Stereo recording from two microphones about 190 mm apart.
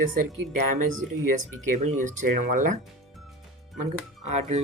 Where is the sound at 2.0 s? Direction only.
40° right (ahead or behind).